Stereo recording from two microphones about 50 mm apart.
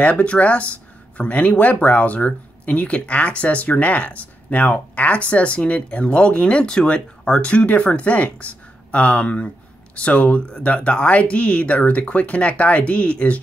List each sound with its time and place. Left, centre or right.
0.0 s speech: left